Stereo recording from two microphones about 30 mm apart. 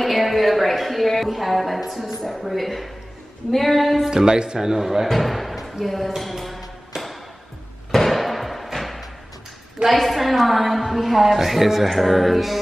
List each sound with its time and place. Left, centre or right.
0.0 s a sound: centre
2.2 s a woman's voice: centre
4.0 s speech: right
4.6 s a man's voice: centre
5.0 s speech: centre
7.9 s a sound: centre
9.8 s a woman's voice: centre